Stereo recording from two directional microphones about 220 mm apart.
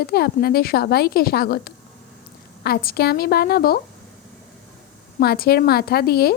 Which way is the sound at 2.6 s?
45° left (ahead or behind).